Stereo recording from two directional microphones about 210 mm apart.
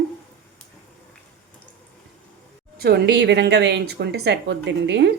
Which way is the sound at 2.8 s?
50° right (ahead or behind).